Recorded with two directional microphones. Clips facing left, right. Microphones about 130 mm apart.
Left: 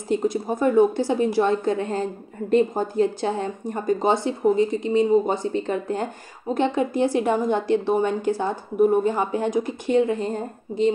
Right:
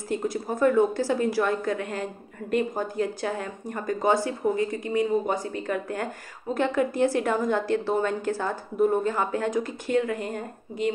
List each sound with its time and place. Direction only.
0.1 s a woman's voice: 20° left (ahead or behind)